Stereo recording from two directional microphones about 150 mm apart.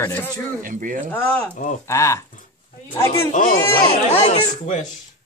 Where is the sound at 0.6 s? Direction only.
65° right (ahead or behind).